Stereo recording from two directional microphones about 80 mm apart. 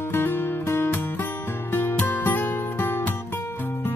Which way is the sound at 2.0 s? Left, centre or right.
Left.